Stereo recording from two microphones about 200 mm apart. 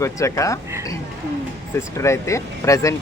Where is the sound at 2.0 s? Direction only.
15° left (ahead or behind).